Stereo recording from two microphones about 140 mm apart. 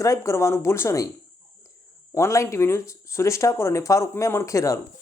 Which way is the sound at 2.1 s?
20° left (ahead or behind).